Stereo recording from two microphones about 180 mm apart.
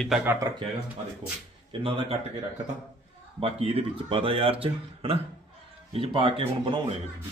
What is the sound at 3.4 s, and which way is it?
Speech, 35° right (ahead or behind).